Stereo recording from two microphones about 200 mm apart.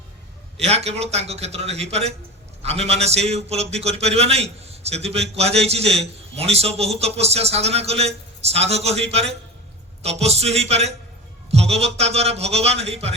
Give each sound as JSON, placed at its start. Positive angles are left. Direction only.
{"t": 0.6, "sound": "a man's voice", "side_deg": -30}